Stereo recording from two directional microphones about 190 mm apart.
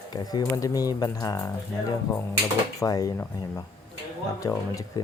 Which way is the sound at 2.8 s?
20° left (ahead or behind).